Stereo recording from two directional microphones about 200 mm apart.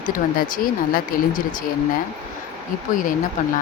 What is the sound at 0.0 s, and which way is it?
Speech, 45° left (ahead or behind).